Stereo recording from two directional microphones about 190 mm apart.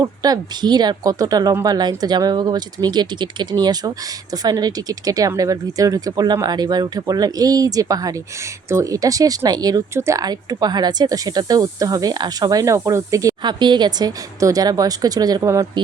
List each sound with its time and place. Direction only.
0.0 s speech: 20° right (ahead or behind)